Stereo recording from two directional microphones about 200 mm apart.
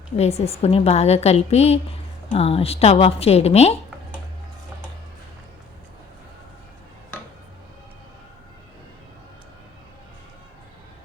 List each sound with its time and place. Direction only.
0.2 s a woman's voice: 30° left (ahead or behind)